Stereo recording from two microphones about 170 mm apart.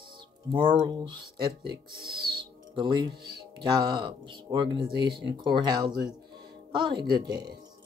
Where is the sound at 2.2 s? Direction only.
30° right (ahead or behind).